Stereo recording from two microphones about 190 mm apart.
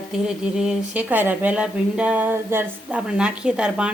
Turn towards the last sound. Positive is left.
turn(degrees=-5)  # may be behind; listen again after turning